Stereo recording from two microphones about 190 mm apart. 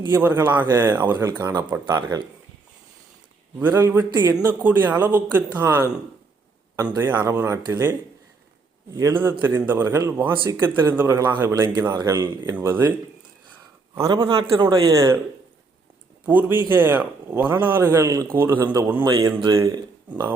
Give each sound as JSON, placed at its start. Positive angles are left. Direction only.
{"t": 0.0, "sound": "a man's voice", "side_deg": -15}
{"t": 3.6, "sound": "a man's voice", "side_deg": -10}
{"t": 6.9, "sound": "a man's voice", "side_deg": -10}
{"t": 9.0, "sound": "a man's voice", "side_deg": -15}
{"t": 13.9, "sound": "a man's voice", "side_deg": -20}
{"t": 16.2, "sound": "a man's voice", "side_deg": -10}